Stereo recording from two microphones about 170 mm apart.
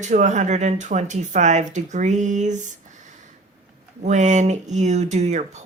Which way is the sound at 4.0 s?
45° right (ahead or behind).